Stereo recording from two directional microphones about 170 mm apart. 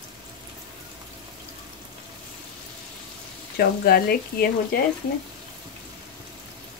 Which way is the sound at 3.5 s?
65° left (ahead or behind).